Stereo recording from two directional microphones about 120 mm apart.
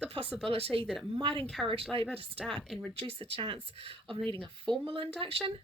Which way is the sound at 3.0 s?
45° right (ahead or behind).